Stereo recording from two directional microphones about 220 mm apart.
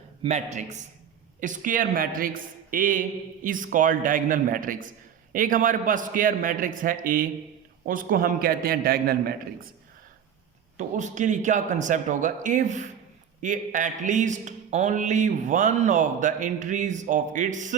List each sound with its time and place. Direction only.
0.2 s speech: 30° right (ahead or behind)
10.8 s speech: 35° right (ahead or behind)